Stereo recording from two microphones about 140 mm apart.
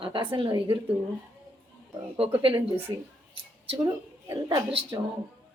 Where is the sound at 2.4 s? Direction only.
40° right (ahead or behind).